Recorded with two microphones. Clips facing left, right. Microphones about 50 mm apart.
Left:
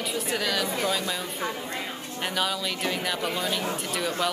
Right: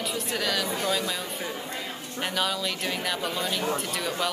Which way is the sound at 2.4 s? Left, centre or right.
Centre.